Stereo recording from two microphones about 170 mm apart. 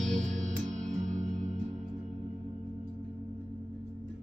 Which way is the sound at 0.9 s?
45° right (ahead or behind).